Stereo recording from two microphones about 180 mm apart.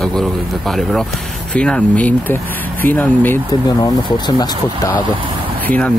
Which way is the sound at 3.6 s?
20° left (ahead or behind).